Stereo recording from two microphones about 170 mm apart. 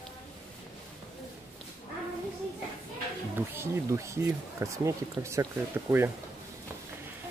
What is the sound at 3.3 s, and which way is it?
Speech, 15° right (ahead or behind).